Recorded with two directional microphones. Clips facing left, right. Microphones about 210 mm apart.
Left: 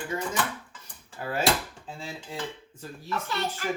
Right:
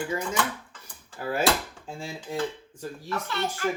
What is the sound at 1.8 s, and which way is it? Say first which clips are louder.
Dishes: right 3 dB; 10° right (ahead or behind).